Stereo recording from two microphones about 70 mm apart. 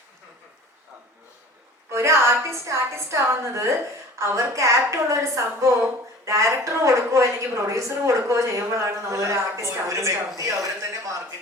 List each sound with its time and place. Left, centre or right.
1.9 s a woman's voice: right